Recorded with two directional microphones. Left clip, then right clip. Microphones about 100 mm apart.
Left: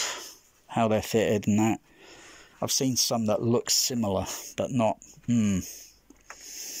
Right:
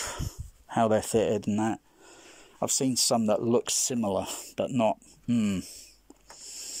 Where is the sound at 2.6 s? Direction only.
15° right (ahead or behind).